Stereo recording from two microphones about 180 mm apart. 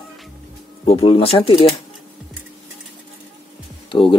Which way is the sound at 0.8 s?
30° left (ahead or behind).